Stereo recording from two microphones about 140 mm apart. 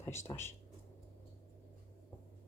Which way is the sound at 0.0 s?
20° left (ahead or behind).